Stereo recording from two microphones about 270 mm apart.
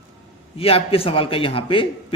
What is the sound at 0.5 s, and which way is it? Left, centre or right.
A man's voice, left.